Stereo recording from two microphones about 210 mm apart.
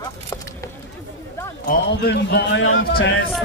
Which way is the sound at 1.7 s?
50° left (ahead or behind).